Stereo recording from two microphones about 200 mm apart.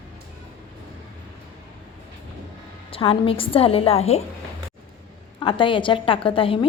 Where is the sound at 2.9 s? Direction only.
25° left (ahead or behind).